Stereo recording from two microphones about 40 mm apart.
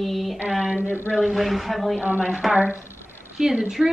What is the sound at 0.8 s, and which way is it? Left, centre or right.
Speech, right.